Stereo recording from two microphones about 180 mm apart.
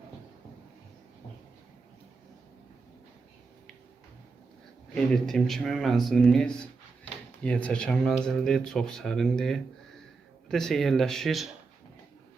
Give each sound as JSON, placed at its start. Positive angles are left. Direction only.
{"t": 4.9, "sound": "speech", "side_deg": 0}